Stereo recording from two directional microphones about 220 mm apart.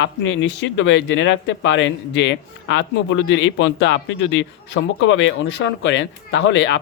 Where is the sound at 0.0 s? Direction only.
55° left (ahead or behind).